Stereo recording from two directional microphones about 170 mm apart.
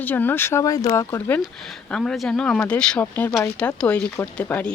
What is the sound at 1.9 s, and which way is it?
Speech, 5° left (ahead or behind).